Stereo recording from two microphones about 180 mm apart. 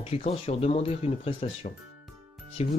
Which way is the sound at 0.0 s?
35° left (ahead or behind).